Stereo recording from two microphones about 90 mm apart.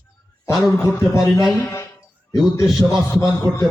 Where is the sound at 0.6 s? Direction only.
30° left (ahead or behind).